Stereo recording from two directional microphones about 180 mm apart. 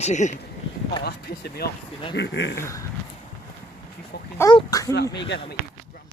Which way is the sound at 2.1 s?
75° left (ahead or behind).